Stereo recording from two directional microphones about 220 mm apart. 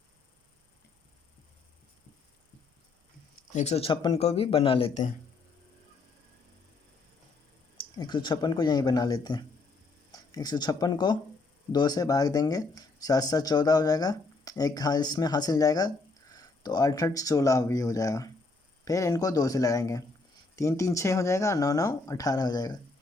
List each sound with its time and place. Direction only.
3.5 s speech: 30° left (ahead or behind)
7.8 s speech: 20° left (ahead or behind)